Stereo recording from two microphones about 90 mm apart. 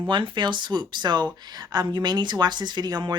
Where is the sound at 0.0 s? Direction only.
65° right (ahead or behind).